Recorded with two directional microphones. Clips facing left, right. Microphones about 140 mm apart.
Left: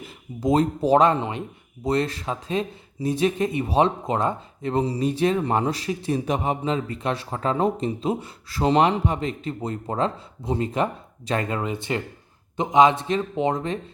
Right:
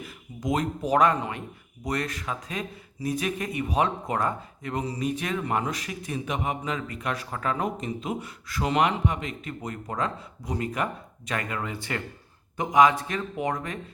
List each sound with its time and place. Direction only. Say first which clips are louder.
0.0 s speech: left 7 dB; 30° left (ahead or behind)